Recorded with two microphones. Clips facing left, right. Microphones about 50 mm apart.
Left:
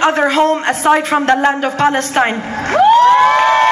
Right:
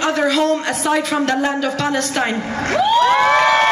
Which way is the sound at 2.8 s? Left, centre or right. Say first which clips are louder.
Left 7 dB; left.